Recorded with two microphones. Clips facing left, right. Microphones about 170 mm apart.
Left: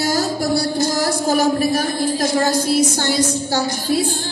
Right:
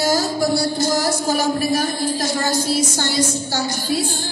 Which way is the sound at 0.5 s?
60° left (ahead or behind).